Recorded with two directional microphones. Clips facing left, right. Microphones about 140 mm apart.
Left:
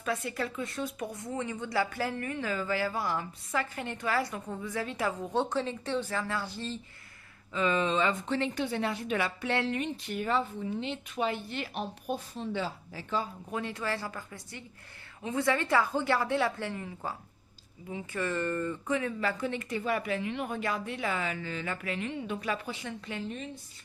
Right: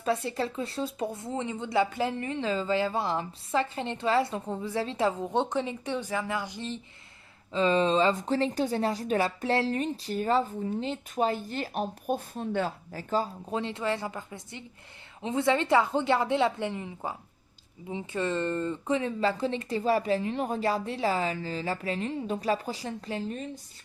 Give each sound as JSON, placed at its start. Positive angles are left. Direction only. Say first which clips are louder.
{"t": 0.0, "sound": "speech", "louder": "right 4 dB", "side_deg": -30}
{"t": 7.5, "sound": "a woman's voice", "louder": "right 4 dB", "side_deg": -30}
{"t": 13.5, "sound": "a woman's voice", "louder": "right 4 dB", "side_deg": -25}